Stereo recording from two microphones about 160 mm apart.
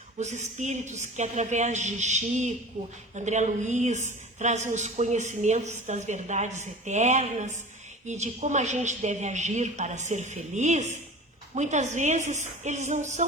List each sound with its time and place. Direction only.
0.2 s speech: 50° right (ahead or behind)